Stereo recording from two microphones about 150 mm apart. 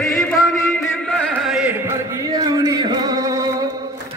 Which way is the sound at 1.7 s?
20° right (ahead or behind).